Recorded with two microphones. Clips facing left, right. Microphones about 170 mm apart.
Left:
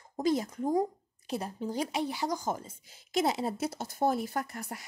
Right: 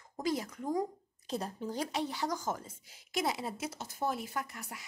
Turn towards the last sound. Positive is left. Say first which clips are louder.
# left 5 dB
turn(degrees=45)  # may be behind; listen again after turning